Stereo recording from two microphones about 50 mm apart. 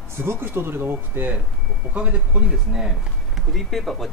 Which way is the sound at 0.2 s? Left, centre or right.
Right.